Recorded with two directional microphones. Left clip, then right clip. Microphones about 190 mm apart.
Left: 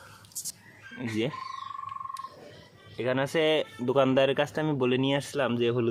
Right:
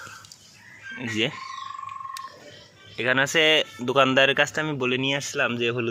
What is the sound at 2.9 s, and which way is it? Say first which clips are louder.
Speech: right 6 dB; 5° left (ahead or behind).